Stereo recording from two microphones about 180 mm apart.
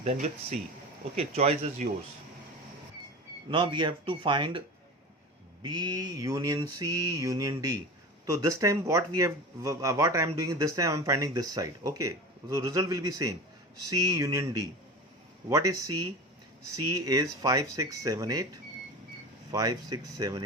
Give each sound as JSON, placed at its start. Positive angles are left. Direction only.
{"t": 0.0, "sound": "speech", "side_deg": -35}
{"t": 3.5, "sound": "mantra", "side_deg": -25}
{"t": 5.6, "sound": "mantra", "side_deg": -25}
{"t": 8.3, "sound": "speech", "side_deg": -20}
{"t": 13.9, "sound": "mantra", "side_deg": -20}
{"t": 17.4, "sound": "mantra", "side_deg": -20}
{"t": 19.5, "sound": "mantra", "side_deg": -20}